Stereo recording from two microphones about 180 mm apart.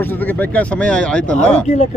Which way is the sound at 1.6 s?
40° left (ahead or behind).